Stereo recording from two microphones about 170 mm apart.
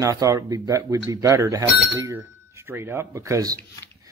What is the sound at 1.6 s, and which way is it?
Speech, centre (ahead or behind).